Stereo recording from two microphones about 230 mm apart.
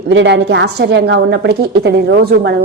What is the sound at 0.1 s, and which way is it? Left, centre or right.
A woman's voice, right.